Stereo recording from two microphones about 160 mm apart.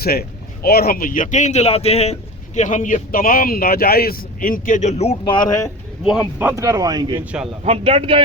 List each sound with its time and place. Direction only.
0.0 s speech: 75° left (ahead or behind); by 2.1 s 40° left (ahead or behind)
2.6 s speech: 50° left (ahead or behind)
5.2 s speech: 30° left (ahead or behind)
6.0 s speech: 5° right (ahead or behind)
6.5 s speech: 20° right (ahead or behind)
7.6 s speech: 40° right (ahead or behind)